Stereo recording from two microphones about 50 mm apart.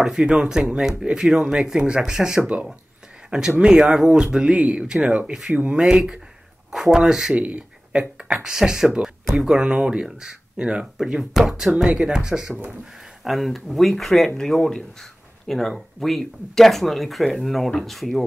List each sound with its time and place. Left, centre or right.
0.0 s speech: centre
2.4 s speech: right
6.7 s a sound: centre
7.0 s speech: centre
7.4 s speech: right
11.0 s speech: centre